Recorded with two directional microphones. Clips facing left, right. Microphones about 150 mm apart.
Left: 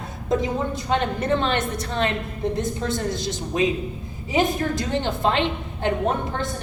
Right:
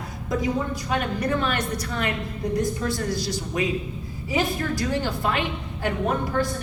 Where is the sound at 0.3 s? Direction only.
25° left (ahead or behind).